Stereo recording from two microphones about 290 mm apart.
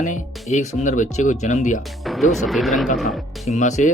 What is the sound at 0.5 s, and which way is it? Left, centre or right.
Speech, left.